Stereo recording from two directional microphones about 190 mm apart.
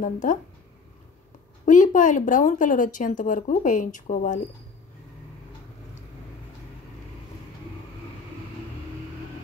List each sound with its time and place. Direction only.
0.0 s speech: 45° left (ahead or behind)
1.7 s speech: 45° left (ahead or behind)